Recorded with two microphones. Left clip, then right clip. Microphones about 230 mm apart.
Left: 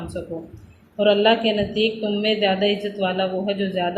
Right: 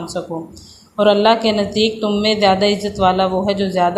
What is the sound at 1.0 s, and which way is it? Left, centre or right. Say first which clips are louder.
Speech: right 4 dB; right.